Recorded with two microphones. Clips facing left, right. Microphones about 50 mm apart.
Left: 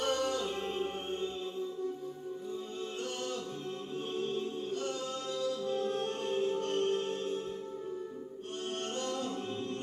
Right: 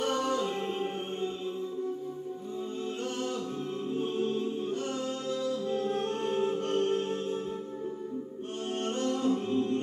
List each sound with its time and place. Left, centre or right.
0.0 s music: right
4.0 s music: right
8.8 s music: right